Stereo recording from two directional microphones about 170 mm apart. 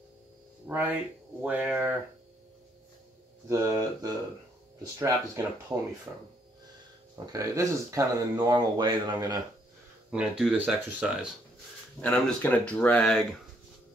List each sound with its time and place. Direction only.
0.7 s speech: 10° right (ahead or behind)
3.4 s speech: 20° right (ahead or behind)
6.1 s speech: 10° right (ahead or behind)
7.3 s speech: 20° right (ahead or behind)
10.1 s speech: 5° right (ahead or behind)
12.0 s speech: 5° left (ahead or behind)